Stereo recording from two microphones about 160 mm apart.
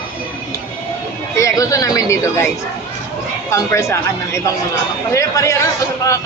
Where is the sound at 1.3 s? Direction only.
20° left (ahead or behind).